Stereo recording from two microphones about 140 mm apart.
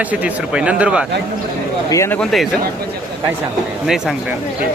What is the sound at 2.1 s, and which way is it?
Speech, 5° left (ahead or behind).